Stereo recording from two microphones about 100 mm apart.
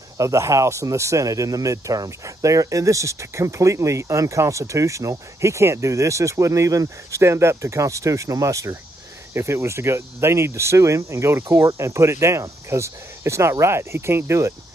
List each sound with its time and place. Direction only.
0.2 s speech: 30° right (ahead or behind)